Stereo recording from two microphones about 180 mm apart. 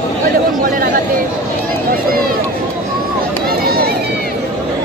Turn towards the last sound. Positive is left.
turn(degrees=-60)  # may be behind; listen again after turning